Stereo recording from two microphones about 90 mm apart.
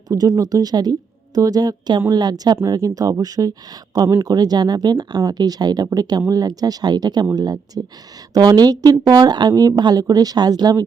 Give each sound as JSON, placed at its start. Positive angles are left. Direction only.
{"t": 0.1, "sound": "speech", "side_deg": -45}